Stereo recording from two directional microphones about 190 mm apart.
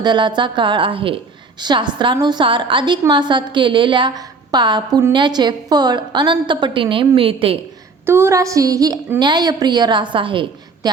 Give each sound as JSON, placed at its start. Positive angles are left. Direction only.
{"t": 0.0, "sound": "a woman's voice", "side_deg": -25}
{"t": 8.0, "sound": "a woman's voice", "side_deg": -15}